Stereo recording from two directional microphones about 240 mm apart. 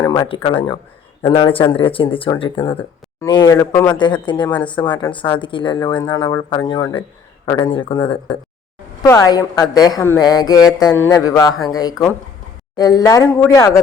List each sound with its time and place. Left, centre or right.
0.0 s a woman's voice: centre